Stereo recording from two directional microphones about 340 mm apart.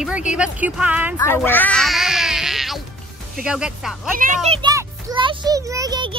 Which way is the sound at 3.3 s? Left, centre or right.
Centre.